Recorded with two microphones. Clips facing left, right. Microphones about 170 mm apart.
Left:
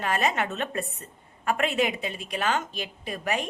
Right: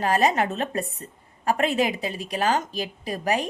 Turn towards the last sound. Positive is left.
turn(degrees=-35)  # may be behind; listen again after turning